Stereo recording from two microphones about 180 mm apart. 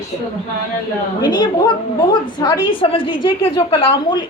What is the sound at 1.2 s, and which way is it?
A woman's voice, 25° left (ahead or behind).